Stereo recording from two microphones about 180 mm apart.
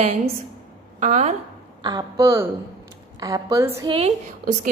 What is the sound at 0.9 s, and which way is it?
Speech, 40° right (ahead or behind).